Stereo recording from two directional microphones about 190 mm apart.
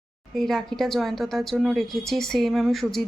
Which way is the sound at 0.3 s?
Centre (ahead or behind).